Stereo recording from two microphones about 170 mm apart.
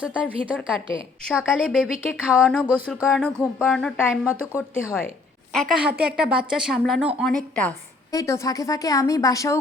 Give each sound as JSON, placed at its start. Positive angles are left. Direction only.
{"t": 0.0, "sound": "a woman's voice", "side_deg": -5}
{"t": 3.4, "sound": "speech", "side_deg": -5}
{"t": 4.3, "sound": "speech", "side_deg": 15}
{"t": 5.5, "sound": "speech", "side_deg": 0}
{"t": 8.1, "sound": "speech", "side_deg": 20}